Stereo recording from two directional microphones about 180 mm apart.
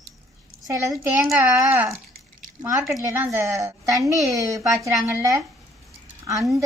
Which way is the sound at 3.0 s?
15° right (ahead or behind).